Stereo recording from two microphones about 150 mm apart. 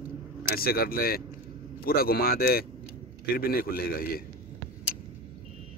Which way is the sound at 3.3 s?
80° left.